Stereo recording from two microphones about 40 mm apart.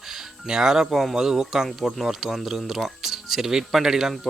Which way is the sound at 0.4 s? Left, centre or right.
Centre.